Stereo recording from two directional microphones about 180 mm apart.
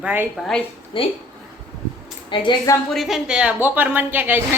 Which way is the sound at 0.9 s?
25° left (ahead or behind).